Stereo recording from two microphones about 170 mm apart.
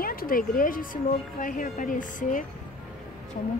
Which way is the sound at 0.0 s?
60° left (ahead or behind).